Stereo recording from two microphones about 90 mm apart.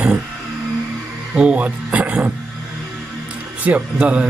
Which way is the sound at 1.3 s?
15° right (ahead or behind).